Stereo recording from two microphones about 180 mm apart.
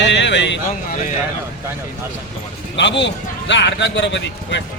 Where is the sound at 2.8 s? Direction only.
80° left.